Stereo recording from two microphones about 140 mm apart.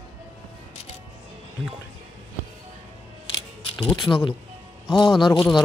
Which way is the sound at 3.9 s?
35° left (ahead or behind).